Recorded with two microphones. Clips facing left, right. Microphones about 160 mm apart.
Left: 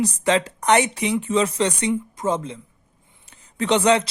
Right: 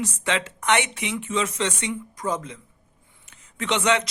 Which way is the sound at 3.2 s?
35° left (ahead or behind).